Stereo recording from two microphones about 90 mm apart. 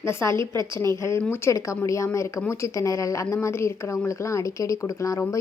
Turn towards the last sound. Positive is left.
turn(degrees=40)  # may be behind; listen again after turning